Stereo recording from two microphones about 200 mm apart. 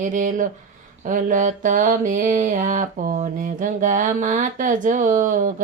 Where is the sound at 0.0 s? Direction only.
40° right (ahead or behind).